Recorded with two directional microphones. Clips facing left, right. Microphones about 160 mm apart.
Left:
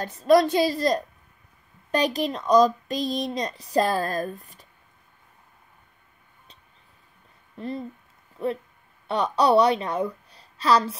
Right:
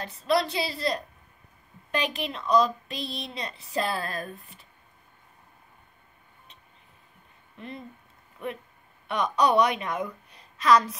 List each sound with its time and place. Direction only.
0.0 s a woman's voice: 45° left (ahead or behind)
7.5 s a woman's voice: 35° left (ahead or behind)